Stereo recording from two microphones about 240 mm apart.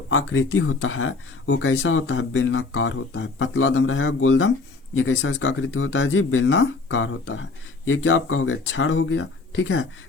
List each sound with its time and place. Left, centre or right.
0.1 s speech: left